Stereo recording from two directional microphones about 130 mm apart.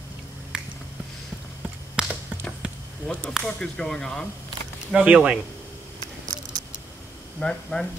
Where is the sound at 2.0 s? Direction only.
5° right (ahead or behind).